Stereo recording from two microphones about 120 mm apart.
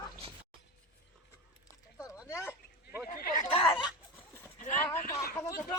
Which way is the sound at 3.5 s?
45° left (ahead or behind).